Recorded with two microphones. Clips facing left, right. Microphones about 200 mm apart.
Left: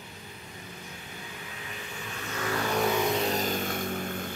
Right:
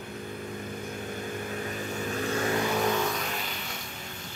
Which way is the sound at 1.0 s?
50° right (ahead or behind).